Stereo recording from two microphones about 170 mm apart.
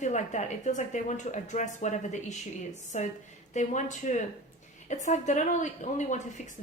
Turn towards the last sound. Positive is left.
turn(degrees=45)  # may be behind; listen again after turning